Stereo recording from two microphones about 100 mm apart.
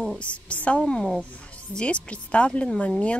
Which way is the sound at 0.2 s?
15° left (ahead or behind).